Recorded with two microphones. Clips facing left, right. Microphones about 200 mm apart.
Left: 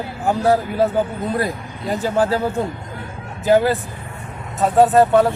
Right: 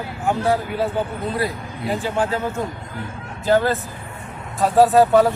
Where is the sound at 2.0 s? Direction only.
40° left (ahead or behind).